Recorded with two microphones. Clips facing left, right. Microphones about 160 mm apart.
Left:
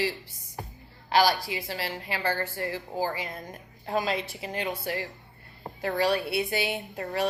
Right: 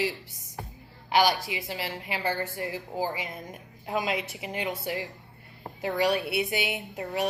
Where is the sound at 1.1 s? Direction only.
20° right (ahead or behind).